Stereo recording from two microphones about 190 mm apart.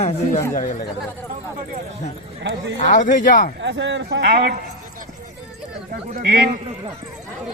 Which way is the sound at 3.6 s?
70° right (ahead or behind).